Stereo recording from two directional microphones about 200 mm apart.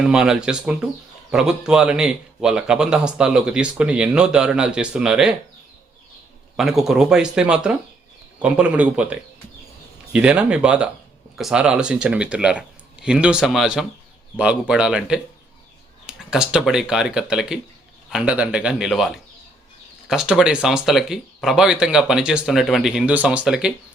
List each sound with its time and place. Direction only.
0.0 s a man's voice: 5° right (ahead or behind)
6.6 s a man's voice: centre (ahead or behind)